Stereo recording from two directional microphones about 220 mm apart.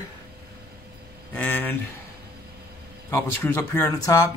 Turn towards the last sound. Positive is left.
turn(degrees=15)  # may be behind; listen again after turning